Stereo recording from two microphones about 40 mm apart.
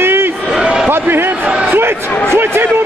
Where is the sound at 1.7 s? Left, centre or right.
Right.